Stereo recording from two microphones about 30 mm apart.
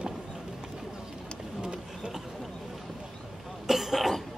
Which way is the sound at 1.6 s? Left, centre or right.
Right.